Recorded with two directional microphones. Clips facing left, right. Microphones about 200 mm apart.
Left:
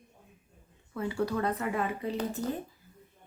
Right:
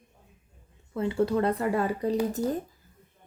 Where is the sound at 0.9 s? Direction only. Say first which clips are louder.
Right 5 dB; 25° right (ahead or behind).